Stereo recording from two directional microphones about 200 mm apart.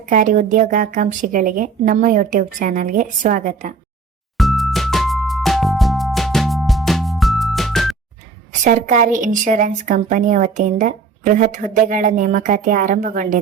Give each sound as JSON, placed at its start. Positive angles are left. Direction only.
{"t": 0.1, "sound": "a woman's voice", "side_deg": -40}
{"t": 4.4, "sound": "music", "side_deg": 0}
{"t": 8.6, "sound": "a woman's voice", "side_deg": -40}